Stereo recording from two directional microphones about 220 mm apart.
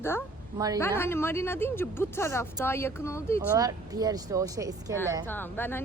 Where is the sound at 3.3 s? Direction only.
15° right (ahead or behind).